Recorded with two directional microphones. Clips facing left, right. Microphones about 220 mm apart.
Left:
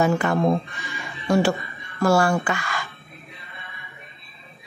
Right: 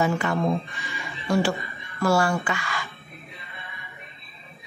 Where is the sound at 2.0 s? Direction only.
45° left (ahead or behind).